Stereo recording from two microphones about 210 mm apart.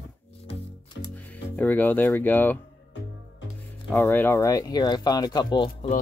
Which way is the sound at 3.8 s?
10° left (ahead or behind).